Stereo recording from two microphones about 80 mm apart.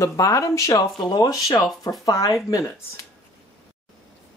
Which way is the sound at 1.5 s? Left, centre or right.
Left.